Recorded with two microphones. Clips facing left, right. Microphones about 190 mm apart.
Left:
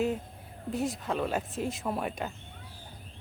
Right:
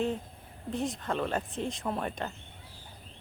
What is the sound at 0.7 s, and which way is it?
Speech, centre (ahead or behind).